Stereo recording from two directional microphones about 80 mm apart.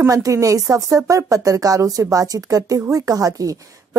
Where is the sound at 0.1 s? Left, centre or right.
Right.